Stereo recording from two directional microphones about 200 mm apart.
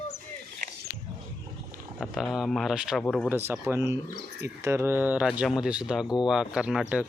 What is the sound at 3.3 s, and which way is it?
Speech, 10° right (ahead or behind).